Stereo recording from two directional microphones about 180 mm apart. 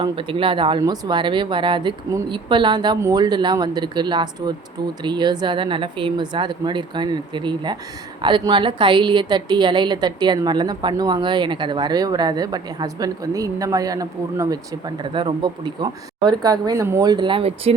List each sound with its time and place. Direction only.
0.0 s a woman's voice: 30° right (ahead or behind)